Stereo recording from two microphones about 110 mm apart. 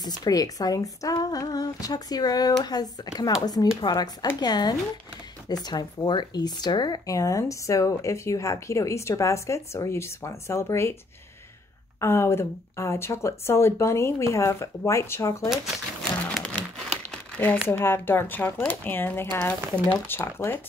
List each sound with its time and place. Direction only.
0.0 s speech: 40° left (ahead or behind)
12.0 s speech: 25° left (ahead or behind)
15.5 s speech: centre (ahead or behind)
17.1 s crumpling: 15° left (ahead or behind)
17.6 s speech: 20° left (ahead or behind)